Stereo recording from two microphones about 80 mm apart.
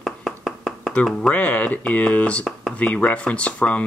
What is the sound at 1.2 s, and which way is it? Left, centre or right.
Speech, centre.